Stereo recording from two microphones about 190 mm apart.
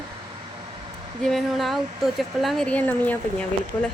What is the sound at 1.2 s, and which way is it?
Speech, centre (ahead or behind).